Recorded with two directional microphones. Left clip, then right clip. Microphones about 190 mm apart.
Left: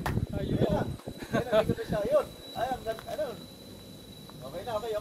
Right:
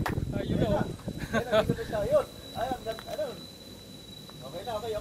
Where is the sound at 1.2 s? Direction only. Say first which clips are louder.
Even; 5° right (ahead or behind).